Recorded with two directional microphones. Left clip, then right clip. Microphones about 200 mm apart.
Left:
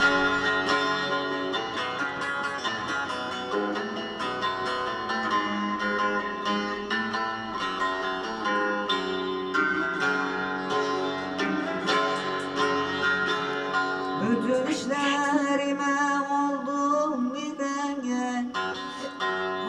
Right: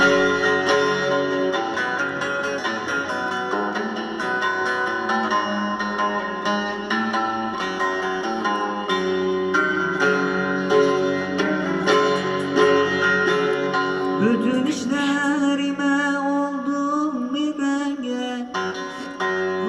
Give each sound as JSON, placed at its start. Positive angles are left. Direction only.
{"t": 0.0, "sound": "music", "side_deg": -45}
{"t": 9.5, "sound": "music", "side_deg": -45}